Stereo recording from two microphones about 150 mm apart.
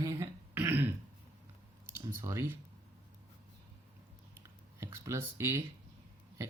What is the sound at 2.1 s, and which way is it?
Speech, 20° right (ahead or behind).